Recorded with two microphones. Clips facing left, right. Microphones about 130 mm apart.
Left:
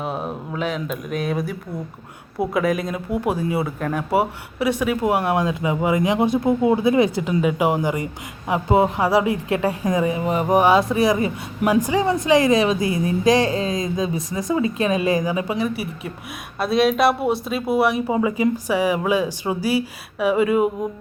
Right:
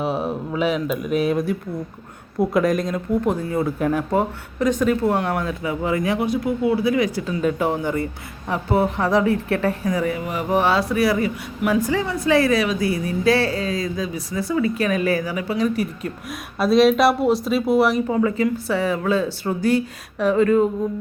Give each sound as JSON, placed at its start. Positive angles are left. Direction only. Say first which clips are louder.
{"t": 0.0, "sound": "speech", "louder": "right 4 dB", "side_deg": 0}
{"t": 3.8, "sound": "speech", "louder": "right 4 dB", "side_deg": -5}
{"t": 4.1, "sound": "speech", "louder": "left 1 dB", "side_deg": 10}
{"t": 10.5, "sound": "a woman's voice", "louder": "left 3 dB", "side_deg": 15}
{"t": 15.5, "sound": "speech", "louder": "right 3 dB", "side_deg": 5}